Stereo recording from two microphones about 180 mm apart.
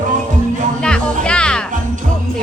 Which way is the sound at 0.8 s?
5° left (ahead or behind).